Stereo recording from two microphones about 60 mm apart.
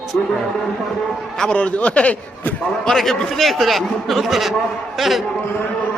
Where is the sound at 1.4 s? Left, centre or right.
Centre.